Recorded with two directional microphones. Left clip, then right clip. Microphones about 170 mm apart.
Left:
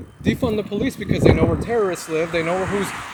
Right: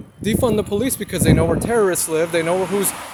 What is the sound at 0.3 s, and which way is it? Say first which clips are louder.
Speech: right 3 dB; 40° right (ahead or behind).